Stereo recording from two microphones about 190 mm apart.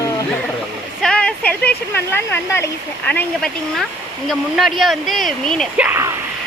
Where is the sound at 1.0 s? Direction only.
5° left (ahead or behind).